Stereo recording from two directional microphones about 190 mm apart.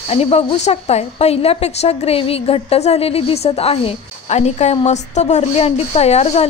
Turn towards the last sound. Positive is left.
turn(degrees=35)  # may be behind; listen again after turning